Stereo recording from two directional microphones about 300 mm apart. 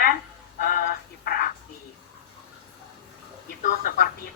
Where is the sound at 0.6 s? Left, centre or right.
Left.